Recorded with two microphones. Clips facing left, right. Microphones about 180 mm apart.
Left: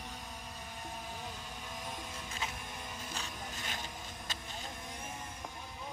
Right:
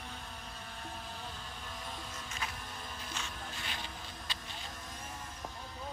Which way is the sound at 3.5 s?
45° left (ahead or behind).